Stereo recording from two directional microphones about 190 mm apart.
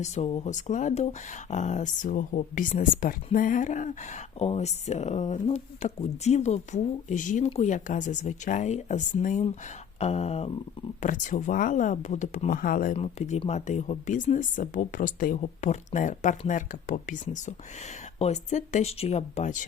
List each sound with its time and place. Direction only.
0.0 s speech: 35° left (ahead or behind)
13.0 s speech: 35° left (ahead or behind)